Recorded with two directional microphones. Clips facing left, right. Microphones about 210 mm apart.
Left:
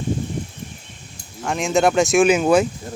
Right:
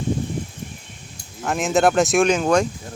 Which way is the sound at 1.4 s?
Centre (ahead or behind).